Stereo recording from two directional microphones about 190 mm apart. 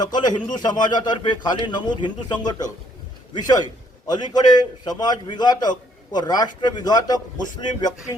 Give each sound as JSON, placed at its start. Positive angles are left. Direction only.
{"t": 0.0, "sound": "a man's voice", "side_deg": 20}